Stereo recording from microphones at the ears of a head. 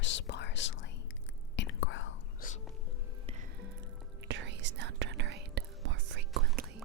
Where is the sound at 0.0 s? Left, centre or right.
Left.